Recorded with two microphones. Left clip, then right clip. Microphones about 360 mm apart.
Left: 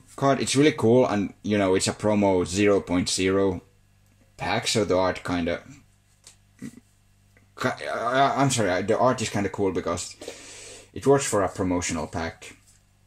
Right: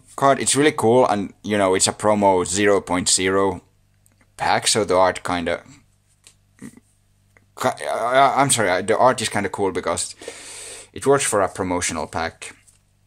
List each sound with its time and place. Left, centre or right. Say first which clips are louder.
0.2 s speech: right 4 dB; centre
4.6 s speech: right 4 dB; centre
7.5 s speech: right 5 dB; centre